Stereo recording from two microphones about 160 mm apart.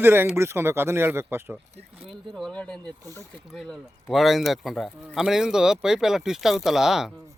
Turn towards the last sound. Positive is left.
turn(degrees=0)  # may be behind; listen again after turning